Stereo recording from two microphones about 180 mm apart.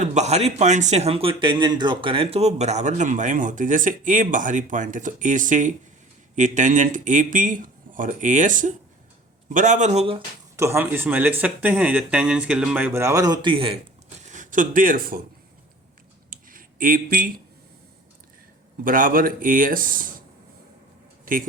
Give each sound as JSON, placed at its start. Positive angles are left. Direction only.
{"t": 0.0, "sound": "a man's voice", "side_deg": -40}
{"t": 10.6, "sound": "speech", "side_deg": -15}
{"t": 14.2, "sound": "speech", "side_deg": -40}
{"t": 16.3, "sound": "a sound", "side_deg": -50}
{"t": 18.9, "sound": "a man's voice", "side_deg": -50}